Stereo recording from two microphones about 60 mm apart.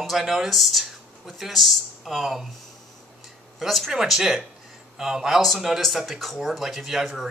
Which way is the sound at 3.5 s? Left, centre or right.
Centre.